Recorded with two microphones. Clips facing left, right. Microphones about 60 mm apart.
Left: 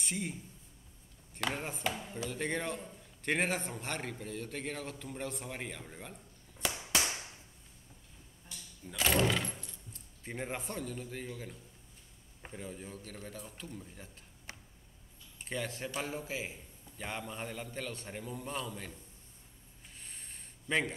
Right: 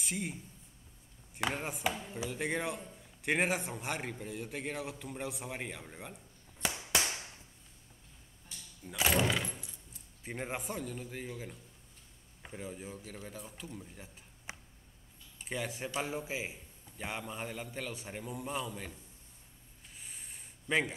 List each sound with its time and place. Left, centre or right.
0.0 s a man's voice: centre
8.5 s door: centre
10.2 s a man's voice: centre
14.5 s a sound: centre
15.4 s a man's voice: centre
20.0 s a sound: centre